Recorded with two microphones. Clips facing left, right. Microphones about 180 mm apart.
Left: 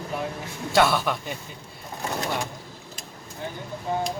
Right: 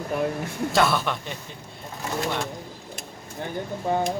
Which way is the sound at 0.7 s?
Centre (ahead or behind).